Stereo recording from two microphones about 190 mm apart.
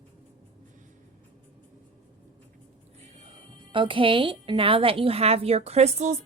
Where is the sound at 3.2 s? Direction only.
30° right (ahead or behind).